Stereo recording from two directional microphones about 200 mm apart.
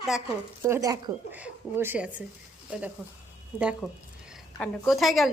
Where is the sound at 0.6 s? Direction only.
15° right (ahead or behind).